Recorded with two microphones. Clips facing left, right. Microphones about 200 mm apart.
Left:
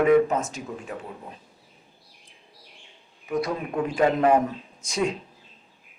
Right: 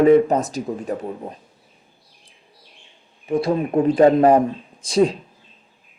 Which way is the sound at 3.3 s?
30° right (ahead or behind).